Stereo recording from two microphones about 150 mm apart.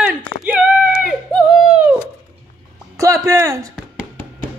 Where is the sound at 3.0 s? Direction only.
20° right (ahead or behind).